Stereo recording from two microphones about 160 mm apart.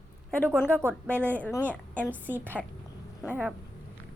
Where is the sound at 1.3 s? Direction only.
10° left (ahead or behind).